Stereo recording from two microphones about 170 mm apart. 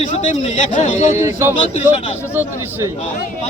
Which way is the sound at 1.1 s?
15° right (ahead or behind).